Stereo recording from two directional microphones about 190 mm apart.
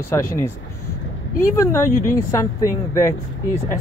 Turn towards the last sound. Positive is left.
turn(degrees=15)  # may be behind; listen again after turning